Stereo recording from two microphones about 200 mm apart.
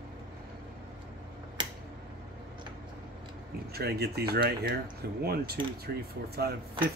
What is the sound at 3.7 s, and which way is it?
Speech, 50° right (ahead or behind).